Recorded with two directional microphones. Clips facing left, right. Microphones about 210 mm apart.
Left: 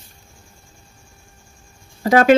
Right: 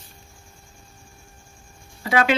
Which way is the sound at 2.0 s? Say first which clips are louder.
Left 8 dB; 45° left (ahead or behind).